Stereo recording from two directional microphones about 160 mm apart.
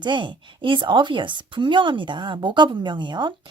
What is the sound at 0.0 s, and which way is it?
Speech, 30° right (ahead or behind).